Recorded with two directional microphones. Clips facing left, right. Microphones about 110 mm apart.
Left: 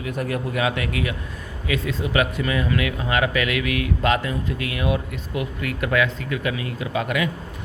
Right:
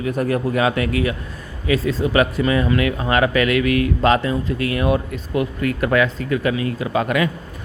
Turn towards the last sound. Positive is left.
turn(degrees=-45)  # may be behind; listen again after turning